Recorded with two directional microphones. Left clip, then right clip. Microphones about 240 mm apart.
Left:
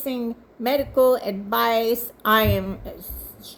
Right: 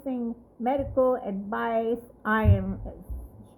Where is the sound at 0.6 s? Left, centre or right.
Centre.